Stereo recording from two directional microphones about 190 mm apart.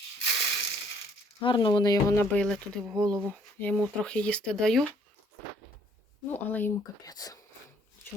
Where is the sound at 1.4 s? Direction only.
25° left (ahead or behind); by 3.1 s centre (ahead or behind).